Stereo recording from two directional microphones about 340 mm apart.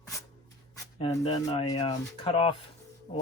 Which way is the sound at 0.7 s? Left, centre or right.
Centre.